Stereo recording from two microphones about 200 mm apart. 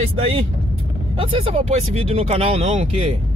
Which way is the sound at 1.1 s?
25° right (ahead or behind).